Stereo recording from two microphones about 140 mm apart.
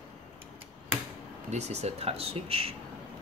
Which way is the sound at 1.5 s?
50° right (ahead or behind).